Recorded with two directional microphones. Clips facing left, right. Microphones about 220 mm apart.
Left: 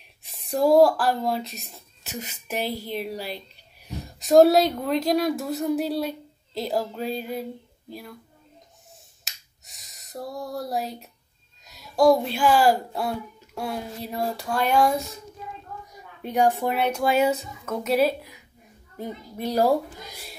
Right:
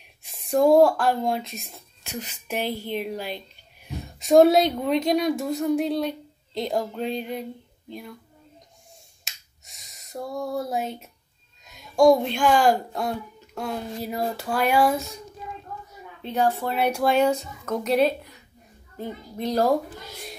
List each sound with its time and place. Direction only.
0.3 s speech: centre (ahead or behind)
2.7 s a woman's voice: 40° left (ahead or behind)
3.3 s a sound: 40° left (ahead or behind)
4.2 s a woman's voice: centre (ahead or behind)
9.2 s finger snapping: centre (ahead or behind)
11.6 s a child's voice: 5° left (ahead or behind)
15.9 s a sound: 15° left (ahead or behind)
16.7 s speech: 10° right (ahead or behind)
17.0 s a woman's voice: 5° left (ahead or behind)